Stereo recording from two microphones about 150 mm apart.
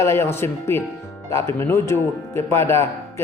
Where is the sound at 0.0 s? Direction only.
15° left (ahead or behind).